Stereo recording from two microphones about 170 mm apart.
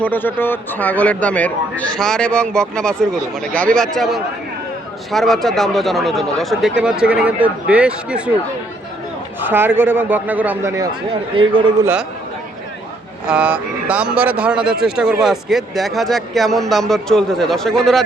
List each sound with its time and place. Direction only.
0.0 s speech: 10° left (ahead or behind); by 8.3 s 5° right (ahead or behind)
9.4 s speech: 10° right (ahead or behind)
11.1 s a man's voice: 30° right (ahead or behind)
11.8 s speech: 10° right (ahead or behind)
13.2 s speech: 5° right (ahead or behind)